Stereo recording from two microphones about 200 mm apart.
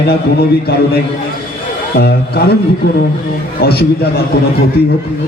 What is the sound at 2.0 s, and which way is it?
Speech, 50° left (ahead or behind).